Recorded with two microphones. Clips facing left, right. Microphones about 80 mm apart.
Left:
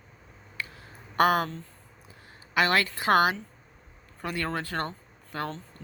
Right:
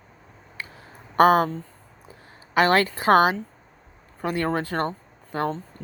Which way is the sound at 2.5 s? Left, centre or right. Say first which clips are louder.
Right 5 dB; right.